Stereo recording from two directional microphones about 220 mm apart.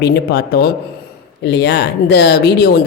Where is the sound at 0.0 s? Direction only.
50° left (ahead or behind).